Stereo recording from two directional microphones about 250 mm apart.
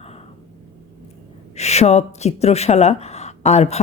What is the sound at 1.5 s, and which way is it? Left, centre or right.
Speech, left.